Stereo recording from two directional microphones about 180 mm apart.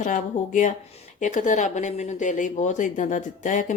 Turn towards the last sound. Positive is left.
turn(degrees=45)  # may be behind; listen again after turning